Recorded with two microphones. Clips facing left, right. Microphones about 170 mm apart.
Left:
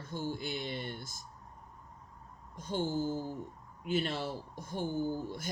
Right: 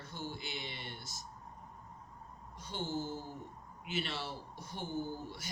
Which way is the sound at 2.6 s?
50° left (ahead or behind).